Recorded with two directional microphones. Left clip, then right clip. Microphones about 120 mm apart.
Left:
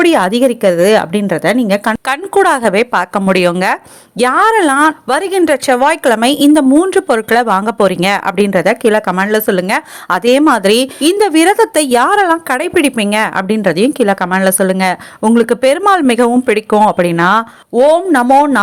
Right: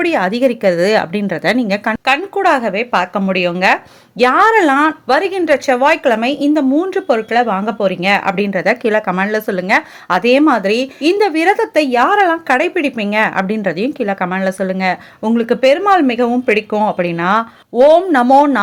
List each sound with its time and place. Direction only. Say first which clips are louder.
0.0 s a woman's voice: left 4 dB; 30° left (ahead or behind)
2.0 s speech: left 1 dB; 50° left (ahead or behind)
4.2 s a woman's voice: even; 35° left (ahead or behind)
7.1 s speech: left 3 dB; 65° left (ahead or behind); by 8.6 s 40° left (ahead or behind)
8.6 s a woman's voice: left 3 dB; 25° left (ahead or behind)